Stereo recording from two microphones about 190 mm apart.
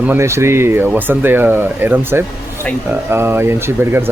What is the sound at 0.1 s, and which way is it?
Speech, 15° right (ahead or behind).